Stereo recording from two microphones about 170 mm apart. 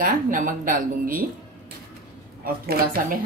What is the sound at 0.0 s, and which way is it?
A woman's voice, 50° right (ahead or behind).